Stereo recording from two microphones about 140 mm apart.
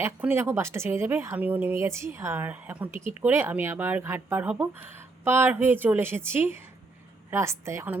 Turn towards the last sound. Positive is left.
turn(degrees=-20)  # may be behind; listen again after turning